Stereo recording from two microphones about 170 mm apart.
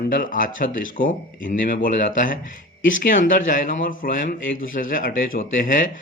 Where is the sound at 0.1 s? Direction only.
55° left (ahead or behind).